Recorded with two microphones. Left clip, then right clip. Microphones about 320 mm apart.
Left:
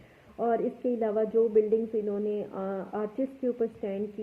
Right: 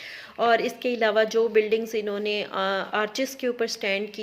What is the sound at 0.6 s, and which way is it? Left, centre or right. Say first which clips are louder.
A woman's voice: right 5 dB; right.